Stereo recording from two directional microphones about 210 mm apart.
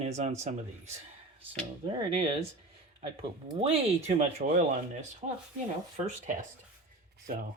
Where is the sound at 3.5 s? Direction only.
30° right (ahead or behind).